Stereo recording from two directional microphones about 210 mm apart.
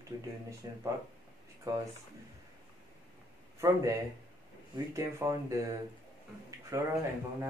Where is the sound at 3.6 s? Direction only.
15° right (ahead or behind).